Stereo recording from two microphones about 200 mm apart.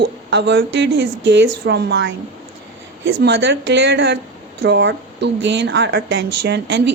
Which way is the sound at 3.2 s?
55° right (ahead or behind).